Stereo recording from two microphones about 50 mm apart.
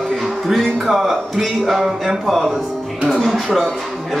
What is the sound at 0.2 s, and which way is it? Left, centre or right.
Music, centre.